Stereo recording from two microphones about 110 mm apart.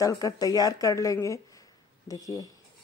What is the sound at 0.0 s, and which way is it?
Speech, 35° left (ahead or behind).